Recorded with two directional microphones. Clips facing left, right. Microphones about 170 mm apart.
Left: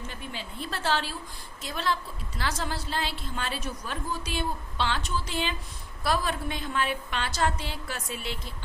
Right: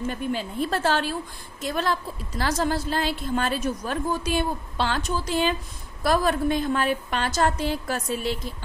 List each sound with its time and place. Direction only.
0.0 s a woman's voice: 50° right (ahead or behind)